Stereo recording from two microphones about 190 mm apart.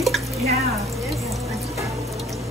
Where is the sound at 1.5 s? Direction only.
15° right (ahead or behind).